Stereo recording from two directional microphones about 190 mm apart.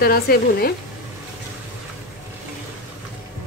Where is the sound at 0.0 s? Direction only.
55° left (ahead or behind).